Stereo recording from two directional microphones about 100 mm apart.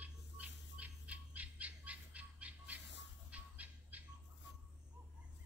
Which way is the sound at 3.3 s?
15° right (ahead or behind).